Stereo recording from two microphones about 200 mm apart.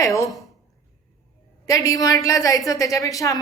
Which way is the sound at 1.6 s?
15° left (ahead or behind).